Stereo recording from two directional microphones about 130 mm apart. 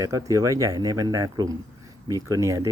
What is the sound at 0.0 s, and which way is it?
Speech, 25° right (ahead or behind).